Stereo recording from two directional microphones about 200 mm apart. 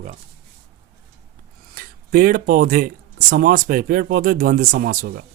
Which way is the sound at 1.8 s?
45° right (ahead or behind).